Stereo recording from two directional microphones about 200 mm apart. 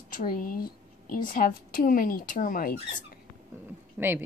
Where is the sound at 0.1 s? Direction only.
45° left (ahead or behind).